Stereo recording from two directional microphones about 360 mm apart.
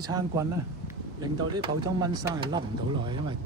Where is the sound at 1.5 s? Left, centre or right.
Centre.